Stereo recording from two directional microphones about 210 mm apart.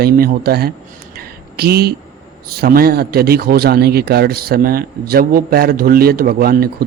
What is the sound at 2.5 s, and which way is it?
A man's voice, 45° right (ahead or behind).